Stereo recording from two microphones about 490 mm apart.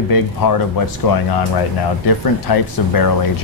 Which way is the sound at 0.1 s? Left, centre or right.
Left.